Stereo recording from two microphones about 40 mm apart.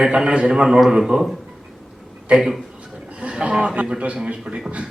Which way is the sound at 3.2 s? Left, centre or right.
Right.